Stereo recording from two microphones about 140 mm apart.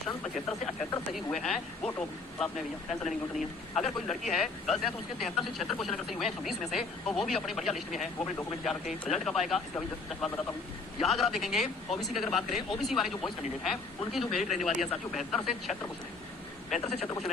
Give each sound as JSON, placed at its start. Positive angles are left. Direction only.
{"t": 1.1, "sound": "speech", "side_deg": 0}
{"t": 9.0, "sound": "speech", "side_deg": 0}
{"t": 16.6, "sound": "a man's voice", "side_deg": 55}